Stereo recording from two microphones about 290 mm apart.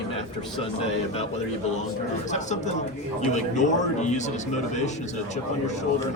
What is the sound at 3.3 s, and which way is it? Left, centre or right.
Speech, left.